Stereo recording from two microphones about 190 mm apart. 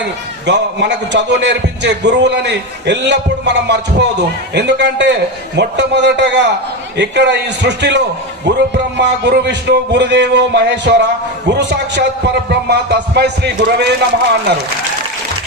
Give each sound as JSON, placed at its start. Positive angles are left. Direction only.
{"t": 0.0, "sound": "a man's voice", "side_deg": -65}